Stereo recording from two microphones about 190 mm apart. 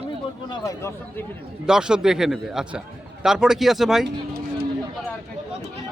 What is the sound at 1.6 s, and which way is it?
A man's voice, 5° right (ahead or behind).